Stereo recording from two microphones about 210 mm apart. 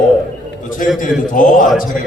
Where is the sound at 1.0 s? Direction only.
40° left (ahead or behind).